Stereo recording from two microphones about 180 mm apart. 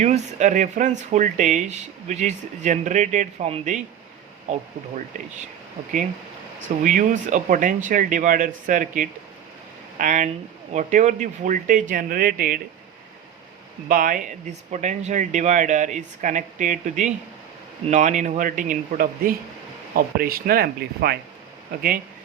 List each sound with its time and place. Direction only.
0.0 s speech: 40° right (ahead or behind)
6.8 s speech: 45° right (ahead or behind)
13.8 s speech: 50° right (ahead or behind)